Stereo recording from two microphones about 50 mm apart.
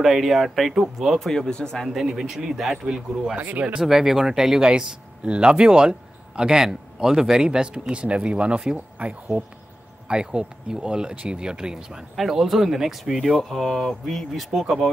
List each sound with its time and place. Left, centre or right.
0.0 s speech: centre
1.2 s speech: centre
1.9 s speech: centre
3.3 s speech: right
3.6 s speech: centre